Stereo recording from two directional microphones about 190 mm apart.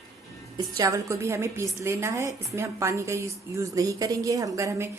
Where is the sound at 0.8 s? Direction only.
15° right (ahead or behind).